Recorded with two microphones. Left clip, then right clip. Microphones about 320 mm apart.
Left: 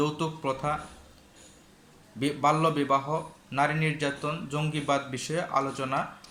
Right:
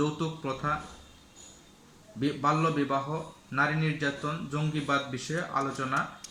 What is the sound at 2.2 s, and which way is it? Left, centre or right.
Speech, centre.